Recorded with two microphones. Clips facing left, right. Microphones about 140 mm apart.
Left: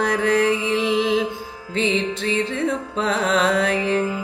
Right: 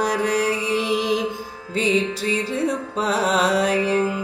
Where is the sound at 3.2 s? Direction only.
10° right (ahead or behind).